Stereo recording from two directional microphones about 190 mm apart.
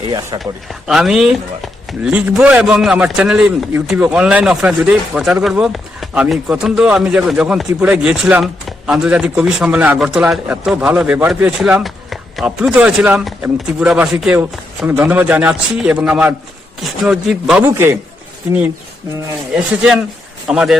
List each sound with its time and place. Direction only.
0.1 s speech: 20° right (ahead or behind)
0.7 s a man's voice: centre (ahead or behind)
19.5 s a man's voice: 5° right (ahead or behind)